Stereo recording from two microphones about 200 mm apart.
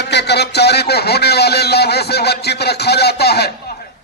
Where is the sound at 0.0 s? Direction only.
55° left (ahead or behind).